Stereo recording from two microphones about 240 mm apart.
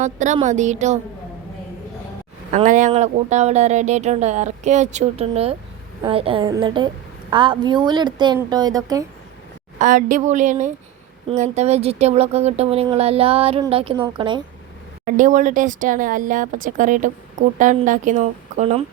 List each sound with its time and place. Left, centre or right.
0.0 s speech: right
2.5 s speech: right; by 9.0 s centre
9.7 s speech: right
15.0 s speech: right